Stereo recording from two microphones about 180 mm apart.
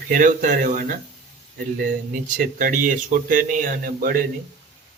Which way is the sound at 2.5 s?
45° right (ahead or behind).